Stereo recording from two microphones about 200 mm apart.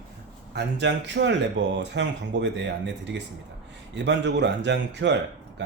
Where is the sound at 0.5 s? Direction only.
60° right (ahead or behind).